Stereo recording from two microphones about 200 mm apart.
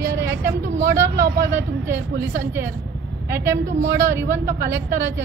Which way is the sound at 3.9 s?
15° right (ahead or behind).